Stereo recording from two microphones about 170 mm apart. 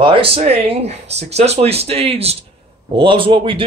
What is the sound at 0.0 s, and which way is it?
Speech, 30° right (ahead or behind).